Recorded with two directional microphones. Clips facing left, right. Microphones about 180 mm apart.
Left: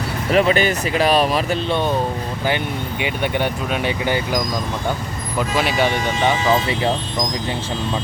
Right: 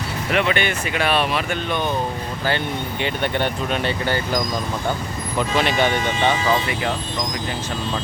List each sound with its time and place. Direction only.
0.3 s speech: 35° left (ahead or behind)
3.0 s speech: 10° left (ahead or behind)
6.4 s speech: 25° left (ahead or behind)